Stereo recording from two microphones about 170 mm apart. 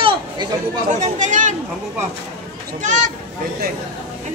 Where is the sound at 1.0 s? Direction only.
45° right (ahead or behind).